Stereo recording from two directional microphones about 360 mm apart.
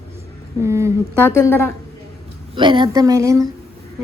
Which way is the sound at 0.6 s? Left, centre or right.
Centre.